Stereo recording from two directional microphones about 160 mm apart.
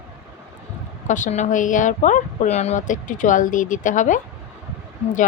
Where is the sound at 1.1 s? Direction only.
50° left (ahead or behind).